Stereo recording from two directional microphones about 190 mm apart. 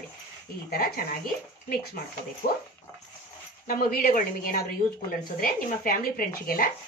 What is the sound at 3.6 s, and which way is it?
Speech, 50° left (ahead or behind).